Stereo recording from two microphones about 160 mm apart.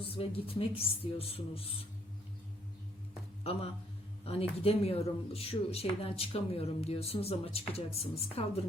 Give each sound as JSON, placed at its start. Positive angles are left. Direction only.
{"t": 0.0, "sound": "speech", "side_deg": 35}
{"t": 3.4, "sound": "speech", "side_deg": 40}